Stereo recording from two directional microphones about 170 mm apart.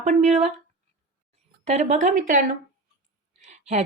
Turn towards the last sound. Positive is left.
turn(degrees=-45)  # may be behind; listen again after turning